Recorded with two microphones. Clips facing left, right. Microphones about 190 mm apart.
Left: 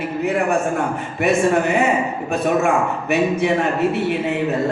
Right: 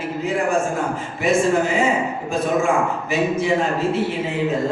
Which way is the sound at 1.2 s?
65° left (ahead or behind).